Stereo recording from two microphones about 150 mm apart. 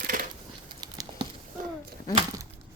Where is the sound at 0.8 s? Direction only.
30° right (ahead or behind).